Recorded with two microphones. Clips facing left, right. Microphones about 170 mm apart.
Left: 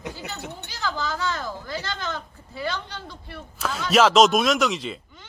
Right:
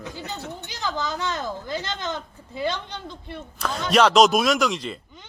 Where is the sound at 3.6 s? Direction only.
5° left (ahead or behind).